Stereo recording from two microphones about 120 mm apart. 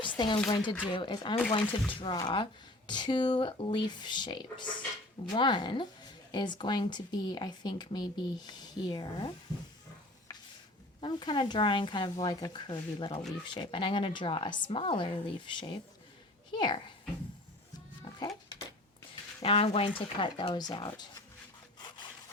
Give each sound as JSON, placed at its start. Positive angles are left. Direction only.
{"t": 0.2, "sound": "a woman's voice", "side_deg": 40}
{"t": 11.0, "sound": "a woman's voice", "side_deg": 40}
{"t": 18.1, "sound": "music", "side_deg": 45}
{"t": 19.4, "sound": "speech", "side_deg": 55}
{"t": 20.1, "sound": "speech", "side_deg": 45}
{"t": 21.8, "sound": "sawing", "side_deg": 40}